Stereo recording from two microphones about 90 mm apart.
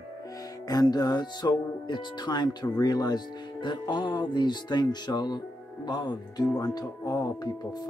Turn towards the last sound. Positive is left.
turn(degrees=45)  # may be behind; listen again after turning